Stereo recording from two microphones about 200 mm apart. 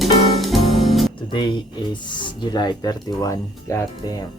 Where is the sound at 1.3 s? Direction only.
25° left (ahead or behind).